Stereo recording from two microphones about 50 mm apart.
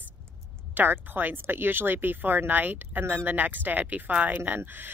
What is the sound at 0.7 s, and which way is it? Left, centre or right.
Speech, right.